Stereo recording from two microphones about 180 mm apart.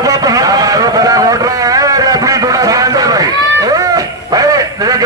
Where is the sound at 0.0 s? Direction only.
20° right (ahead or behind).